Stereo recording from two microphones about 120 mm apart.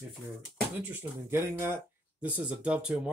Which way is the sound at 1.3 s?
20° right (ahead or behind).